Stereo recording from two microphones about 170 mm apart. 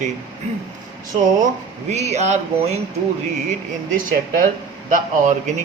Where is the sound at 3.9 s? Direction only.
55° right (ahead or behind).